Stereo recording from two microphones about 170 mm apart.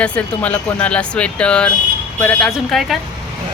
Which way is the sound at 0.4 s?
10° left (ahead or behind).